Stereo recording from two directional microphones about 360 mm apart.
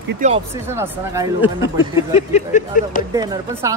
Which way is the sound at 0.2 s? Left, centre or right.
Right.